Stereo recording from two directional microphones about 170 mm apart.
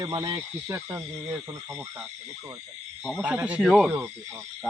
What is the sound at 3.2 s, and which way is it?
Speech, 10° right (ahead or behind).